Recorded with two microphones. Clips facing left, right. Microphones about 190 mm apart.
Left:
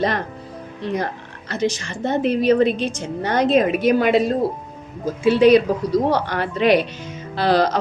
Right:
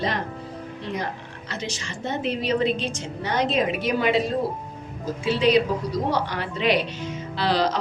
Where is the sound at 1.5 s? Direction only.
55° left (ahead or behind).